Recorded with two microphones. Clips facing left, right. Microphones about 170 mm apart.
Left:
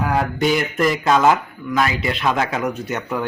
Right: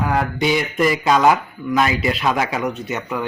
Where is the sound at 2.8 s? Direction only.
10° right (ahead or behind).